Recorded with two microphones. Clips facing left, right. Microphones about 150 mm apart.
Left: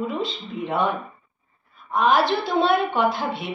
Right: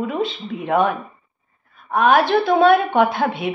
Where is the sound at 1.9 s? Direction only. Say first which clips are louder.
Right 4 dB; 60° right (ahead or behind).